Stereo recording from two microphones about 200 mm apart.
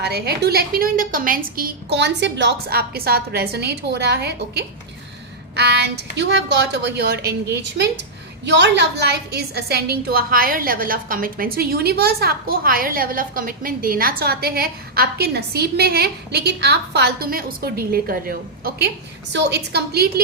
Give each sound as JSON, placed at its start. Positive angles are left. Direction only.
{"t": 0.0, "sound": "a woman's voice", "side_deg": -55}
{"t": 19.3, "sound": "a woman's voice", "side_deg": -60}